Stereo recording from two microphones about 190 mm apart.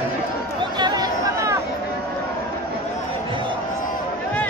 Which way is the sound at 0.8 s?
20° right (ahead or behind).